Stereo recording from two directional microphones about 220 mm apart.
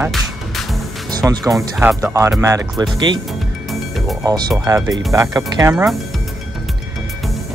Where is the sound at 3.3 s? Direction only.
Centre (ahead or behind).